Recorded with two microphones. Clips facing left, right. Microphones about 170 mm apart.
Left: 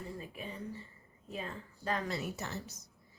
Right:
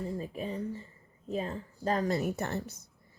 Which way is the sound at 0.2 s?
35° right (ahead or behind).